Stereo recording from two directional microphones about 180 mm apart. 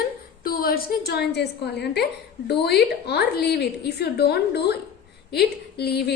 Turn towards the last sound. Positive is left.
turn(degrees=65)  # may be behind; listen again after turning